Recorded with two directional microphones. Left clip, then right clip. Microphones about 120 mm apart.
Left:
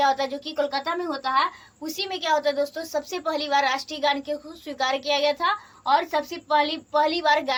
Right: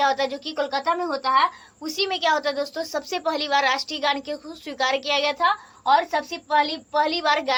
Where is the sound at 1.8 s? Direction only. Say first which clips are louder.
Right 5 dB; 35° right (ahead or behind).